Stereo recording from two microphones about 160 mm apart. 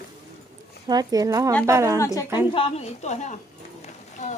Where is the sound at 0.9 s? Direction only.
25° right (ahead or behind).